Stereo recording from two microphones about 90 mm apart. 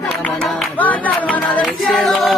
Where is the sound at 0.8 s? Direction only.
15° left (ahead or behind).